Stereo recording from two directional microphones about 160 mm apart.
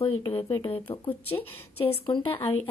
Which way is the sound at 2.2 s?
35° left (ahead or behind).